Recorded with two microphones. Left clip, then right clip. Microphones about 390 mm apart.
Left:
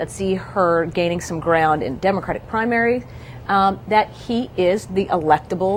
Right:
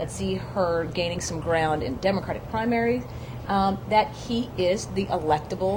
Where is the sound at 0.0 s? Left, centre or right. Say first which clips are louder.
Left 7 dB; left.